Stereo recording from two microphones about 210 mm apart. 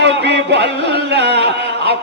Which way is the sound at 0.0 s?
55° right (ahead or behind).